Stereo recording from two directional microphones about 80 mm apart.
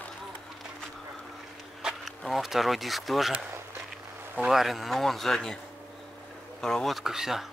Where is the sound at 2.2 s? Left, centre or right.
Centre.